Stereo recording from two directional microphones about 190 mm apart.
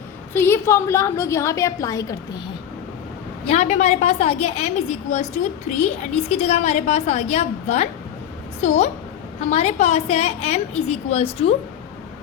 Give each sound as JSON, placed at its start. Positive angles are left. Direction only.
{"t": 0.3, "sound": "a woman's voice", "side_deg": 10}
{"t": 3.4, "sound": "a woman's voice", "side_deg": 35}